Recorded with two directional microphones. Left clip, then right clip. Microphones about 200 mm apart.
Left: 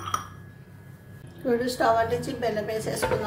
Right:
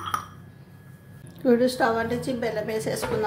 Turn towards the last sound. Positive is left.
turn(degrees=-35)  # may be behind; listen again after turning